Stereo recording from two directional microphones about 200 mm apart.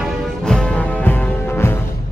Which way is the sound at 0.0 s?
5° left (ahead or behind).